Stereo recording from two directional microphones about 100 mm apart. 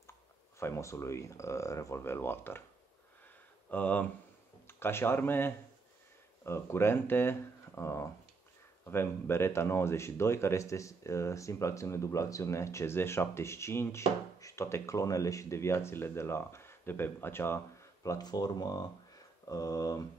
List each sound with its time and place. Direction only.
0.6 s speech: 30° left (ahead or behind)
3.7 s speech: 15° left (ahead or behind)
18.0 s speech: 40° left (ahead or behind)